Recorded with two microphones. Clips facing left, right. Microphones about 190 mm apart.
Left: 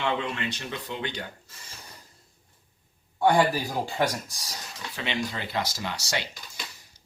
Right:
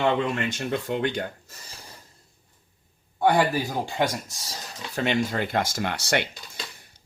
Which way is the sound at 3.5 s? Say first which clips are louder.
Right 2 dB; 20° right (ahead or behind).